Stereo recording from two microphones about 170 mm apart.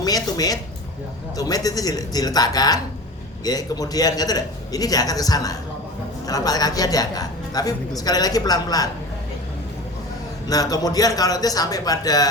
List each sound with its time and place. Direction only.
0.0 s a woman's voice: 20° left (ahead or behind)
10.5 s a woman's voice: 20° left (ahead or behind)